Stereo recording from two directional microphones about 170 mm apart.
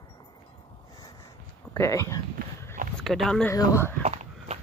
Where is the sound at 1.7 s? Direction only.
20° left (ahead or behind).